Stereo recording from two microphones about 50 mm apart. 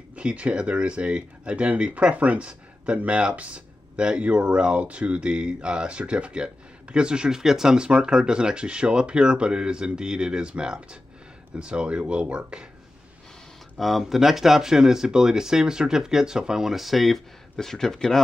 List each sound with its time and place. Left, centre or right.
0.1 s speech: right
13.7 s speech: centre